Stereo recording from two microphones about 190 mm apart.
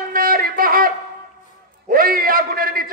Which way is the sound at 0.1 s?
50° right (ahead or behind).